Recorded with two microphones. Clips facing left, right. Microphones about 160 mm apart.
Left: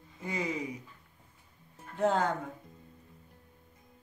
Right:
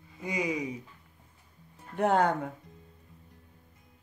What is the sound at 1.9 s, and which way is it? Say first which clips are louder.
Speech: right 3 dB; 60° right (ahead or behind).